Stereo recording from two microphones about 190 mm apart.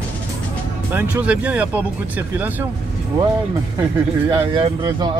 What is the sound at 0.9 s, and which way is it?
Speech, 10° right (ahead or behind).